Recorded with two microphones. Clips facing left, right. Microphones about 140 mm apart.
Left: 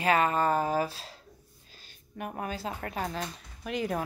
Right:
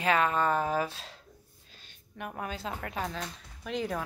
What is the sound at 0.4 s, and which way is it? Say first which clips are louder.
Speech: left 1 dB; 40° left (ahead or behind).